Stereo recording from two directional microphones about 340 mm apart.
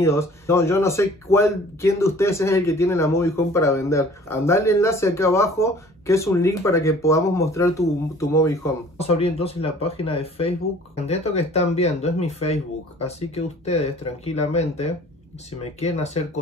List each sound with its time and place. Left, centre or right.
0.0 s speech: centre